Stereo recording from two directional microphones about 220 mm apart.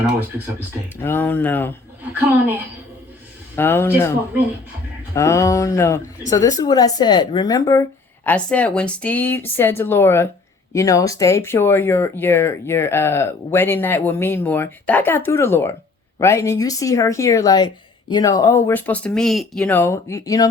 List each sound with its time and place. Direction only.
1.0 s speech: 10° left (ahead or behind)
3.5 s speech: 10° left (ahead or behind)
5.1 s speech: 15° left (ahead or behind)